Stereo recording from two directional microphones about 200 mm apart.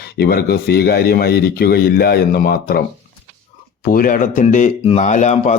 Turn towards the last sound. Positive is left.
turn(degrees=35)  # may be behind; listen again after turning